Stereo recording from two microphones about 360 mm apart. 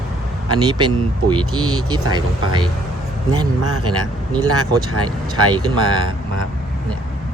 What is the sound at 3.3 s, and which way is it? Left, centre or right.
Speech, centre.